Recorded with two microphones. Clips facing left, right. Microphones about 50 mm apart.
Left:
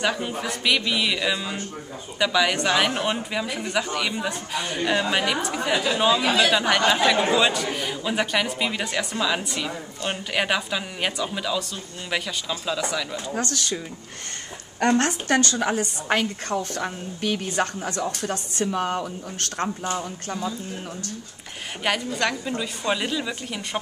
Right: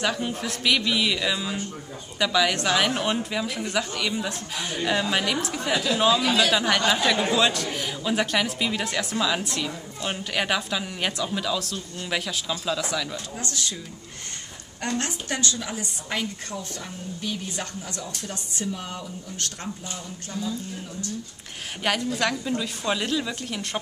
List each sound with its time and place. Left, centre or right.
0.0 s speech: centre
5.9 s a woman's voice: centre
13.3 s speech: left
14.8 s a woman's voice: left
21.8 s a woman's voice: centre